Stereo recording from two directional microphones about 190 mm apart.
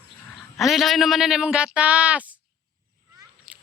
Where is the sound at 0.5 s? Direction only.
Centre (ahead or behind).